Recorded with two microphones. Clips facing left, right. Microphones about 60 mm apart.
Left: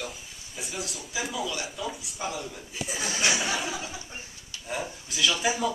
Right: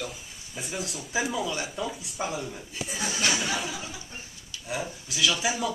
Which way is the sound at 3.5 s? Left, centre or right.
Centre.